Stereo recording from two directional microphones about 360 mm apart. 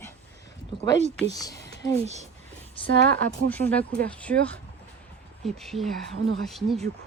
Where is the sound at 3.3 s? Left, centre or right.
Centre.